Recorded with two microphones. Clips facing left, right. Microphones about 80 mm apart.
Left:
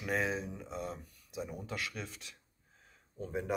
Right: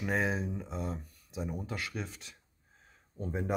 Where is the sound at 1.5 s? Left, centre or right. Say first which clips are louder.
Right 2 dB; centre.